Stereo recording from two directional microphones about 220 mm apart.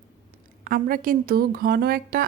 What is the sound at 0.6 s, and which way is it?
A woman's voice, 40° right (ahead or behind).